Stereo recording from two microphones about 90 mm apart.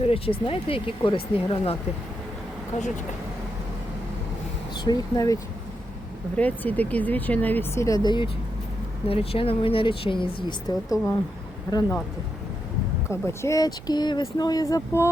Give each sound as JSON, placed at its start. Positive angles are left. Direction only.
{"t": 0.1, "sound": "speech", "side_deg": 90}
{"t": 5.1, "sound": "speech", "side_deg": 40}
{"t": 6.3, "sound": "speech", "side_deg": 20}
{"t": 7.8, "sound": "speech", "side_deg": 40}
{"t": 8.0, "sound": "speech", "side_deg": 60}
{"t": 9.0, "sound": "speech", "side_deg": 90}
{"t": 10.8, "sound": "speech", "side_deg": 40}
{"t": 13.1, "sound": "speech", "side_deg": 30}
{"t": 13.6, "sound": "speech", "side_deg": 50}